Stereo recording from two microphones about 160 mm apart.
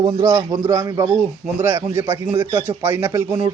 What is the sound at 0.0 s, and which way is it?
A man's voice, 20° right (ahead or behind).